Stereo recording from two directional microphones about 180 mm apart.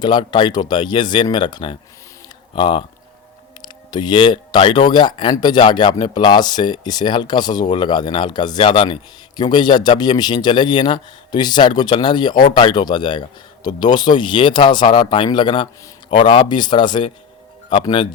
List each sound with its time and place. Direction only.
0.0 s speech: 25° left (ahead or behind)
3.9 s speech: 25° left (ahead or behind)